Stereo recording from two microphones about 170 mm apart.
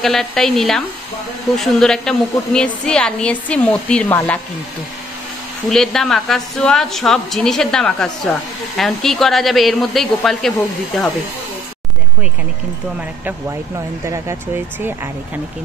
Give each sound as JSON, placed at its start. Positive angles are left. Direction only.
{"t": 0.0, "sound": "a woman's voice", "side_deg": 5}
{"t": 5.7, "sound": "a woman's voice", "side_deg": 0}
{"t": 13.2, "sound": "speech", "side_deg": -15}